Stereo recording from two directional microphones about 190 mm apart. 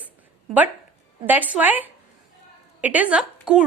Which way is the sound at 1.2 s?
10° right (ahead or behind).